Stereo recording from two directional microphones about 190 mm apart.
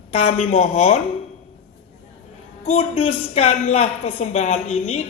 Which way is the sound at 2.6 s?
35° left (ahead or behind).